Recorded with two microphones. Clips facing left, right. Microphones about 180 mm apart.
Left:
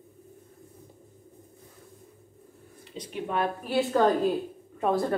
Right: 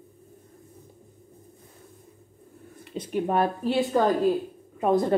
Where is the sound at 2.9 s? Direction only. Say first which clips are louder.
Right 6 dB; 50° right (ahead or behind).